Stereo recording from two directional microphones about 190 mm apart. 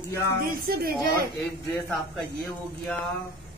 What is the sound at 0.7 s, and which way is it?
Speech, 50° right (ahead or behind).